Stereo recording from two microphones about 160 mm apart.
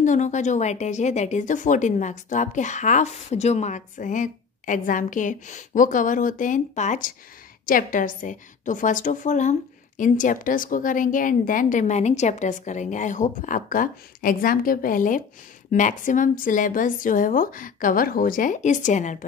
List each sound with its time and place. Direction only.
0.0 s a woman's voice: 50° left (ahead or behind)